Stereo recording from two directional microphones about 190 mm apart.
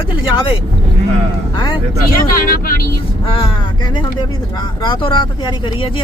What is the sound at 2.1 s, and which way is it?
Speech, 50° left (ahead or behind).